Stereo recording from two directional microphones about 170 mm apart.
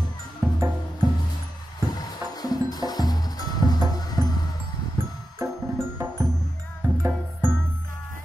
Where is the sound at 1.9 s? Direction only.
25° left (ahead or behind).